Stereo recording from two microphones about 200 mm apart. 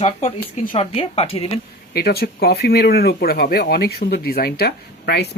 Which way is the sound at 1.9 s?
50° left (ahead or behind).